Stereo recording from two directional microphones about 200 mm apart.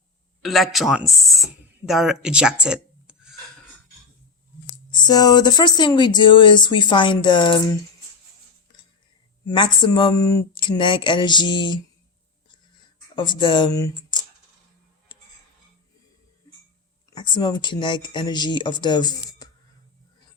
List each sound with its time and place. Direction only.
0.4 s speech: centre (ahead or behind)
4.9 s speech: 20° left (ahead or behind)
9.5 s speech: 20° left (ahead or behind)
13.1 s speech: 20° left (ahead or behind)
17.1 s speech: 20° left (ahead or behind)